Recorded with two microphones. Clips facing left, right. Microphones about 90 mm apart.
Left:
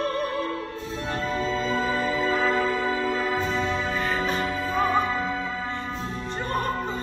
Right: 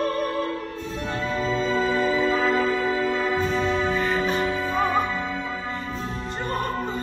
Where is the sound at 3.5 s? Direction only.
Centre (ahead or behind).